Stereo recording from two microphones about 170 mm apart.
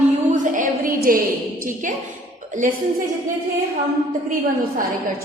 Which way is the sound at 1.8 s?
50° right (ahead or behind).